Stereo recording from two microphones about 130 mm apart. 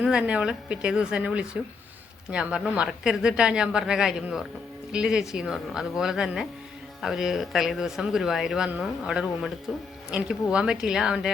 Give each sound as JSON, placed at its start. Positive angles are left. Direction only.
{"t": 0.0, "sound": "a woman's voice", "side_deg": -5}